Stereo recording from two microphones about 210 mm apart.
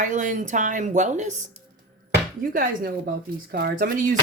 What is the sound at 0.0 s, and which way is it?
Speech, 40° right (ahead or behind).